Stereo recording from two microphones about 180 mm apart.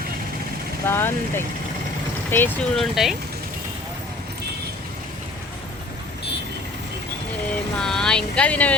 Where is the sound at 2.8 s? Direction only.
Centre (ahead or behind).